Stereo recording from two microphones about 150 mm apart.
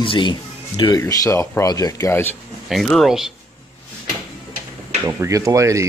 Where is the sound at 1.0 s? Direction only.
20° left (ahead or behind).